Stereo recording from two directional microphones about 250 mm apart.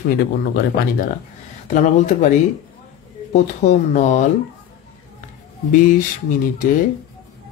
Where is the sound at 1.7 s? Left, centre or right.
Left.